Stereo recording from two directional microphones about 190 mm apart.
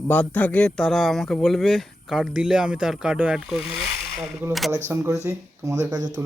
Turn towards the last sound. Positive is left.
turn(degrees=-20)  # may be behind; listen again after turning